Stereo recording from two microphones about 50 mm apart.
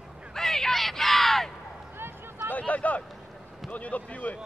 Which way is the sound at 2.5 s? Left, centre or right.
Left.